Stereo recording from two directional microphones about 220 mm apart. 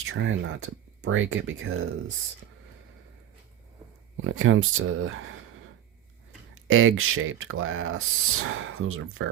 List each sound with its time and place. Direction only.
0.0 s speech: 60° right (ahead or behind)
4.2 s speech: 60° right (ahead or behind)
6.7 s speech: 65° right (ahead or behind)